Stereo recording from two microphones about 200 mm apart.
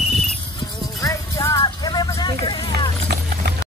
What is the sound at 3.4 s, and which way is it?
Music, 55° right (ahead or behind).